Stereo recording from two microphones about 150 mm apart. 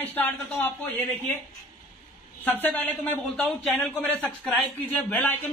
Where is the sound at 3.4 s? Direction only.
5° left (ahead or behind).